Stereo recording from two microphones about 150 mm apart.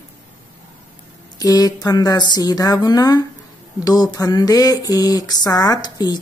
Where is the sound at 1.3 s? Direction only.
25° left (ahead or behind).